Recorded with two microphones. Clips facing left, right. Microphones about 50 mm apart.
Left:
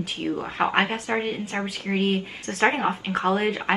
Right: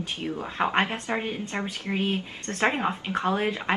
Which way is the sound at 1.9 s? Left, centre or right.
Centre.